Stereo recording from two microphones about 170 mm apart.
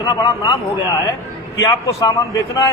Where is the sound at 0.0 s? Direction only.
25° left (ahead or behind).